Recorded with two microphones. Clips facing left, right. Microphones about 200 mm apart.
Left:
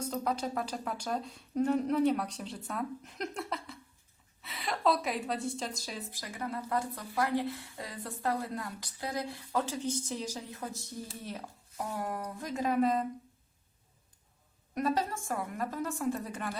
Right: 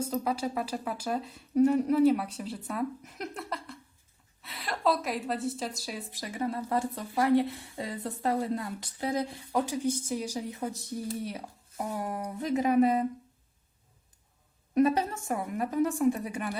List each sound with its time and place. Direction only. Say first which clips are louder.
0.1 s a woman's voice: right 3 dB; 5° right (ahead or behind)
6.1 s a woman's voice: right 7 dB; 25° right (ahead or behind)
14.8 s a woman's voice: right 6 dB; 20° right (ahead or behind)